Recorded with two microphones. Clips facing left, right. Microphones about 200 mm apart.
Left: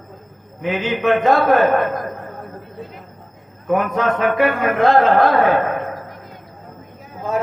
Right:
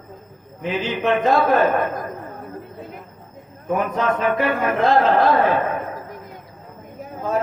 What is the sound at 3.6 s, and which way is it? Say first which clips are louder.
A man's voice: left 3 dB; 55° left (ahead or behind).